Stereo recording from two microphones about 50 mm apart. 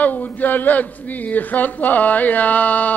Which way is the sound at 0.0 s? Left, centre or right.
Left.